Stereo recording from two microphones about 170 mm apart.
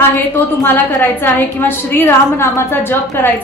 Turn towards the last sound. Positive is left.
turn(degrees=15)  # may be behind; listen again after turning